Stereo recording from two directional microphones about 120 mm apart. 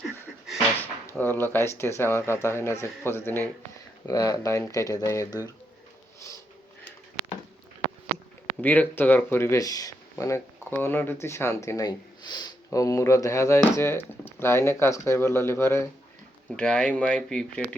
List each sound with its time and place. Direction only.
0.0 s a sound: centre (ahead or behind)
1.2 s speech: 15° left (ahead or behind)
4.0 s speech: 30° left (ahead or behind)
8.6 s speech: 15° left (ahead or behind)
16.6 s speech: 10° left (ahead or behind)